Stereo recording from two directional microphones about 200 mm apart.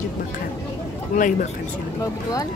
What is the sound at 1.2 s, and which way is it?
Speech, 40° left (ahead or behind).